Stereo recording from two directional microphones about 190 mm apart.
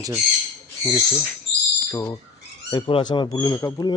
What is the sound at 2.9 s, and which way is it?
Speech, 25° left (ahead or behind).